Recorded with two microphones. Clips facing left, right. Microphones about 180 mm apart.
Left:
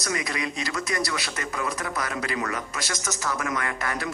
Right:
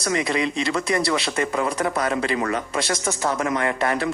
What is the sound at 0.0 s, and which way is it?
Speech, 25° right (ahead or behind).